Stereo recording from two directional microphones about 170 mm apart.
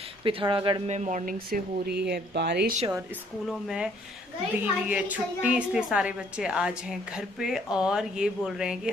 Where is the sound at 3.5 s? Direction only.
5° right (ahead or behind).